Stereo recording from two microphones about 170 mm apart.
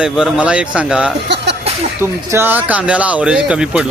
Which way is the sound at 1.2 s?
90° right.